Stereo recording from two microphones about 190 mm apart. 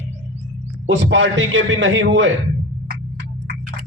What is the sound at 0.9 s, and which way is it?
A man's voice, 70° right (ahead or behind).